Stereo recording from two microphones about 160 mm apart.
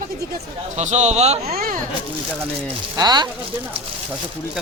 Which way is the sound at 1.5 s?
65° right (ahead or behind).